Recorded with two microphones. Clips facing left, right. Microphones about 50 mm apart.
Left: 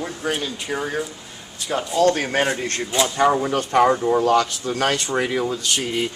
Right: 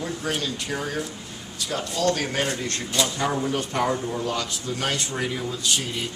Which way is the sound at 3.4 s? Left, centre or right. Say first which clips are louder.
Left 7 dB; left.